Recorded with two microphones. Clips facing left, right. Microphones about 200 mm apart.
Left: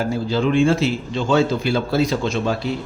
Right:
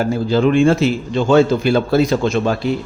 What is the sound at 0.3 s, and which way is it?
Speech, 50° right (ahead or behind).